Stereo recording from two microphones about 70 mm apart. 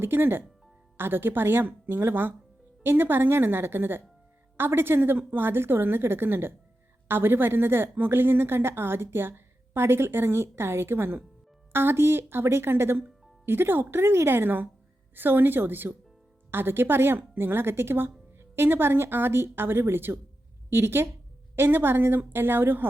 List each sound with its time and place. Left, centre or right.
0.0 s a woman's voice: right